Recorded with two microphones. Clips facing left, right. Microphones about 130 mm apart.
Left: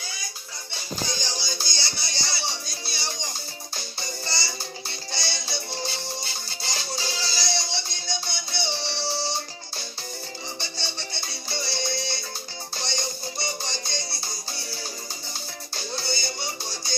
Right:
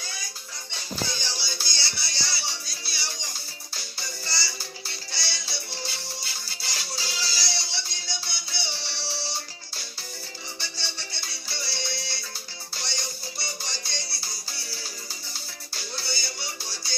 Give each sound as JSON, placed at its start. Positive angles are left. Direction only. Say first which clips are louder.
{"t": 1.4, "sound": "music", "louder": "left 3 dB", "side_deg": 45}
{"t": 1.6, "sound": "music", "louder": "left 2 dB", "side_deg": 20}